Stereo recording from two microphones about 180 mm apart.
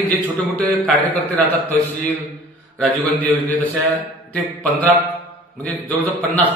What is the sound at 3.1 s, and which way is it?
A man's voice, 10° left (ahead or behind).